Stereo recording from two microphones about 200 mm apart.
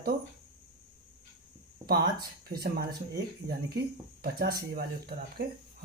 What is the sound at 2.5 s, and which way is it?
Speech, 50° right (ahead or behind).